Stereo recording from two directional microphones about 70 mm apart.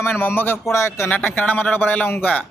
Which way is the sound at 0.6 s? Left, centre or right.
Left.